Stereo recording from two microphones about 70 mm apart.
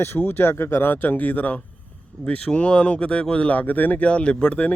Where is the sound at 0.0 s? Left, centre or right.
Left.